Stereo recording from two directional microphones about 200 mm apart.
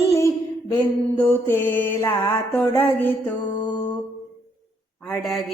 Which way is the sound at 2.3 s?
10° left (ahead or behind).